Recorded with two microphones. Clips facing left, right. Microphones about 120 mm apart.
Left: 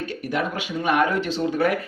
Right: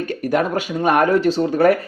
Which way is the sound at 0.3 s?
45° right (ahead or behind).